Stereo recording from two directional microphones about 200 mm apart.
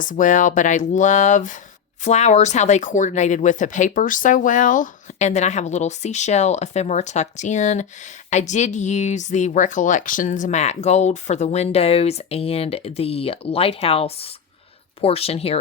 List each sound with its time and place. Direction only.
0.0 s speech: 40° left (ahead or behind)